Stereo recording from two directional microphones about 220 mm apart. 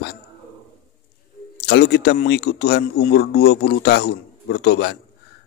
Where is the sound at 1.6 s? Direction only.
50° left (ahead or behind).